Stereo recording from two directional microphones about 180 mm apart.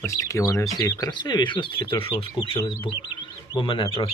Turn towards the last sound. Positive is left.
turn(degrees=30)  # may be behind; listen again after turning